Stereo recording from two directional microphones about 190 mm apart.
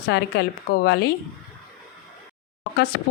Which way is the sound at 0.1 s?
60° left (ahead or behind).